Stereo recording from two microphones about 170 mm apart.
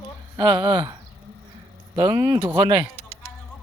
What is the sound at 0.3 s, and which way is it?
Speech, 25° right (ahead or behind).